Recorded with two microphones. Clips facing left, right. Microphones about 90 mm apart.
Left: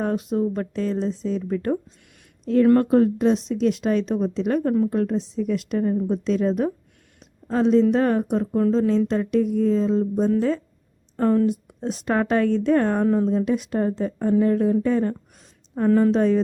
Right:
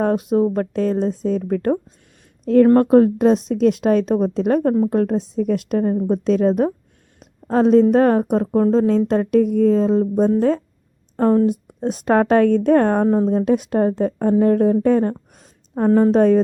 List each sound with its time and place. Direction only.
0.0 s a woman's voice: 50° right (ahead or behind)
13.3 s a woman's voice: 50° right (ahead or behind)
15.4 s a sound: 35° right (ahead or behind)
16.1 s a woman's voice: 45° right (ahead or behind)